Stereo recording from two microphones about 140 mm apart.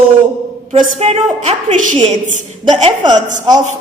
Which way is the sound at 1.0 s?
50° right (ahead or behind).